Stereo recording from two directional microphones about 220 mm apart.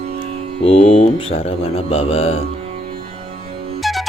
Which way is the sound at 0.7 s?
25° left (ahead or behind).